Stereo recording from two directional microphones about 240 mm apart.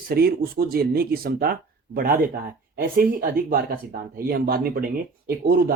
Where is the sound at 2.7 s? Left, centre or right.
Right.